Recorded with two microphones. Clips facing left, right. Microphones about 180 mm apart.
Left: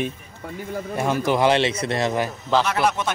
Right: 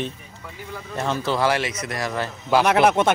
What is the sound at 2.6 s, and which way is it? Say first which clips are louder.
Speech: right 5 dB; 60° right (ahead or behind).